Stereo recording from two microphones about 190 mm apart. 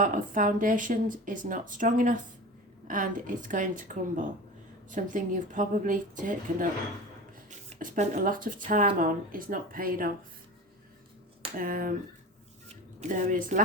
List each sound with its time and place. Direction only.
0.0 s speech: 45° right (ahead or behind)
7.7 s speech: 40° right (ahead or behind)
11.5 s speech: 50° right (ahead or behind)
12.6 s a sound: 40° right (ahead or behind)